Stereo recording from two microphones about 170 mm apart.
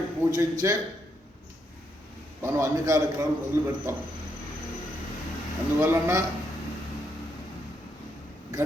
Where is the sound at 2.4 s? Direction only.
15° right (ahead or behind).